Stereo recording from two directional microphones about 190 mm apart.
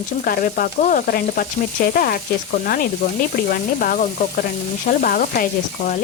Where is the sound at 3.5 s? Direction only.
45° left (ahead or behind).